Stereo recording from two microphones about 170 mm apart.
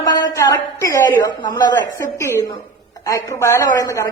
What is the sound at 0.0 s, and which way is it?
A woman's voice, 25° left (ahead or behind).